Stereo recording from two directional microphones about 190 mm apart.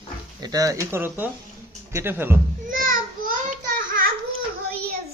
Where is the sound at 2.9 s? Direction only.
45° right (ahead or behind).